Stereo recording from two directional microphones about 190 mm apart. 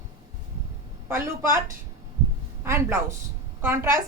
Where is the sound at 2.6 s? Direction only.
15° right (ahead or behind).